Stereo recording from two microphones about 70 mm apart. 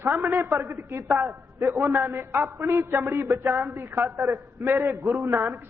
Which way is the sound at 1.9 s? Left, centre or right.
Right.